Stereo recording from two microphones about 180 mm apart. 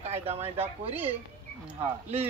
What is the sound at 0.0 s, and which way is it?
Speech, 35° right (ahead or behind).